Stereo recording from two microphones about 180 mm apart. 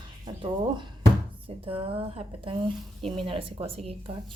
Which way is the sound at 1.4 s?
30° right (ahead or behind).